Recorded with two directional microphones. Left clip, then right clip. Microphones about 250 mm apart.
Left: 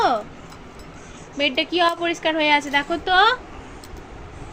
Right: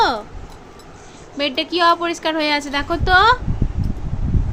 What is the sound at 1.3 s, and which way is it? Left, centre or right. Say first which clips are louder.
Speech: even; right.